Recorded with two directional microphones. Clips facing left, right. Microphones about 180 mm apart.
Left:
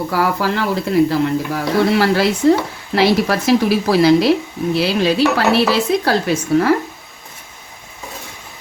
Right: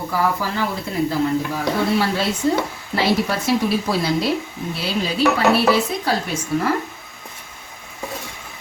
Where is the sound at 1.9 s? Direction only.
90° left.